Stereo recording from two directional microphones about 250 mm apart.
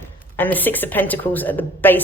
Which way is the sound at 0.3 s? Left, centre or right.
Centre.